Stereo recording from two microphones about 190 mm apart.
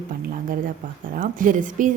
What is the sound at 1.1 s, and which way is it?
Speech, 45° right (ahead or behind).